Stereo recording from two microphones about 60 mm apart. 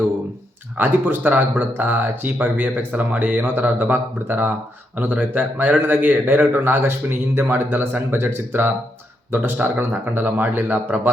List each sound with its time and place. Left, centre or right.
0.8 s a man's voice: right